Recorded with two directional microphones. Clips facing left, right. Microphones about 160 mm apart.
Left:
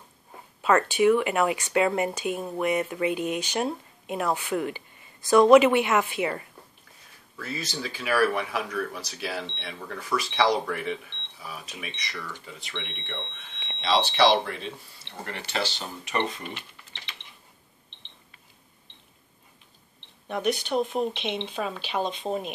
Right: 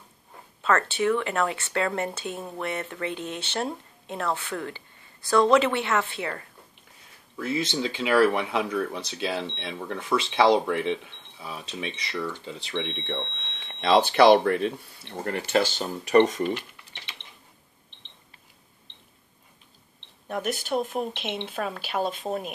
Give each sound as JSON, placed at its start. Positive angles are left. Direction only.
{"t": 0.6, "sound": "speech", "side_deg": 15}
{"t": 7.3, "sound": "speech", "side_deg": -20}
{"t": 13.5, "sound": "speech", "side_deg": -45}
{"t": 20.2, "sound": "speech", "side_deg": 0}